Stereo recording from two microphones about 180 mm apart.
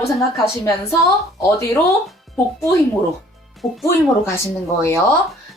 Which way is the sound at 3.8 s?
15° left (ahead or behind).